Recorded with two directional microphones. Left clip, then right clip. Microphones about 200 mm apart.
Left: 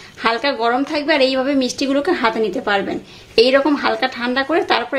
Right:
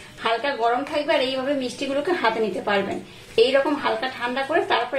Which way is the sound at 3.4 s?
55° left (ahead or behind).